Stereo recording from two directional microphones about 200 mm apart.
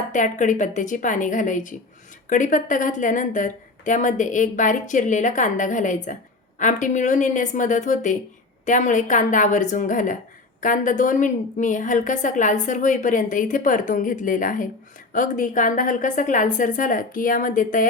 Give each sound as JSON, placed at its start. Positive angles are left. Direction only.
{"t": 0.1, "sound": "a woman's voice", "side_deg": 40}